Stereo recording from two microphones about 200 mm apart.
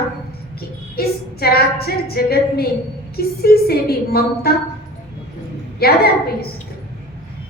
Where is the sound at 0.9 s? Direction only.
50° left (ahead or behind).